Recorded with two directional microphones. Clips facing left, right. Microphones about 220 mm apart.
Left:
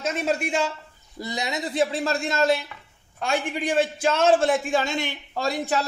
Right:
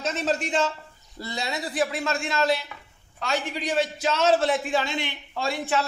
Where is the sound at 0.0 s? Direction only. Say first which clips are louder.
Left 1 dB; 10° left (ahead or behind).